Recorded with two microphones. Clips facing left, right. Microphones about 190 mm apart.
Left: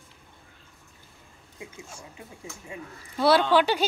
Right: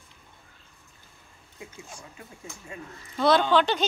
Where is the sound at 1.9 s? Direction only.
20° left (ahead or behind).